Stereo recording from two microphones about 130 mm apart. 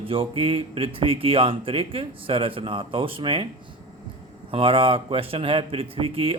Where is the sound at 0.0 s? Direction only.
45° right (ahead or behind).